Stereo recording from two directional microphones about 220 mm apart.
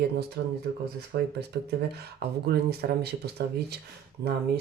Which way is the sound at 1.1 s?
45° right (ahead or behind).